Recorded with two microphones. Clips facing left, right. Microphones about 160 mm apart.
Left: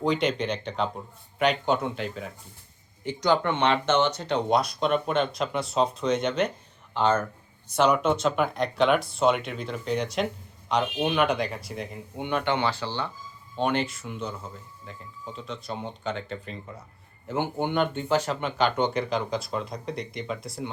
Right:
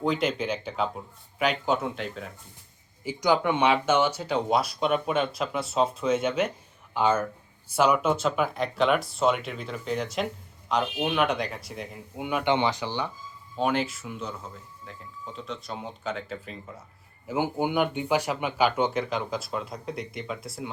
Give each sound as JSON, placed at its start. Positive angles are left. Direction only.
{"t": 0.0, "sound": "speech", "side_deg": 0}
{"t": 12.5, "sound": "speech", "side_deg": -20}
{"t": 13.6, "sound": "speech", "side_deg": 0}